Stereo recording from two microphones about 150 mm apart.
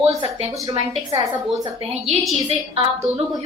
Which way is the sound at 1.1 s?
25° right (ahead or behind).